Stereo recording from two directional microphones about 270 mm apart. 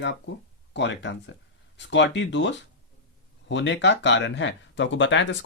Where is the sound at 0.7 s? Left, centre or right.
Left.